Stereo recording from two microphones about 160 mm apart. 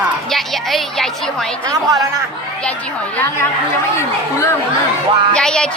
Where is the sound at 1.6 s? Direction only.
25° right (ahead or behind).